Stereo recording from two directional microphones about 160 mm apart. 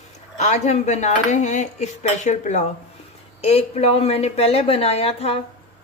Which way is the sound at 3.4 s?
40° left (ahead or behind).